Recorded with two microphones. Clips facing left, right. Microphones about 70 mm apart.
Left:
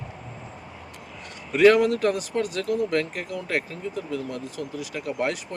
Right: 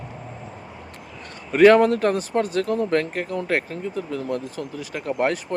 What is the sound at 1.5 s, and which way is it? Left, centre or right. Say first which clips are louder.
Speech: right 3 dB; right.